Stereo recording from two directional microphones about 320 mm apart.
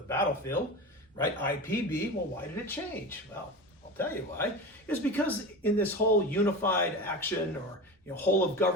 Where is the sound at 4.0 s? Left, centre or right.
Centre.